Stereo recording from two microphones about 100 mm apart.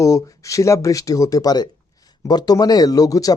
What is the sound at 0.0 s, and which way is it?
Speech, 35° left (ahead or behind).